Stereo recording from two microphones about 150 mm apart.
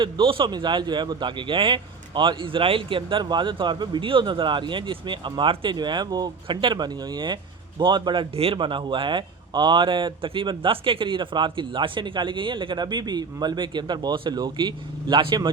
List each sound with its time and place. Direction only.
0.0 s a man's voice: 35° right (ahead or behind)